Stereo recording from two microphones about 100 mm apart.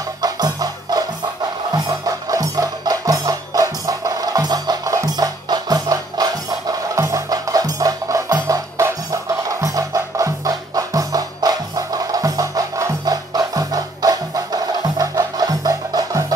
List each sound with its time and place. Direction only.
0.2 s music: 40° right (ahead or behind)